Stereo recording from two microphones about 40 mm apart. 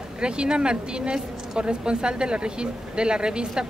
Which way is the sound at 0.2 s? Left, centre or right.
Right.